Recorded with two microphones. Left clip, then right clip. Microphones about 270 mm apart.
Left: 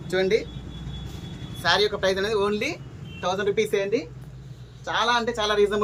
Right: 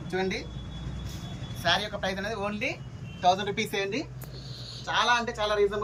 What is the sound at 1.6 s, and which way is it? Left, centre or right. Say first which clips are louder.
A man's voice: left 6 dB; left.